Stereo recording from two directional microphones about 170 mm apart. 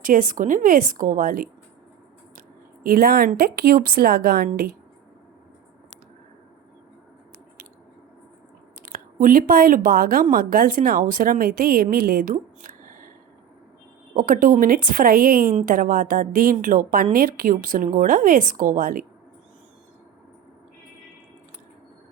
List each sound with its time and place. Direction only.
0.0 s a woman's voice: 55° right (ahead or behind)
2.8 s a woman's voice: 60° right (ahead or behind)
8.8 s a woman's voice: 55° right (ahead or behind)
14.2 s a woman's voice: 55° right (ahead or behind)